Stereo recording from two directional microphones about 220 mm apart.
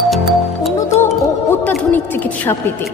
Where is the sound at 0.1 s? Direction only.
Centre (ahead or behind).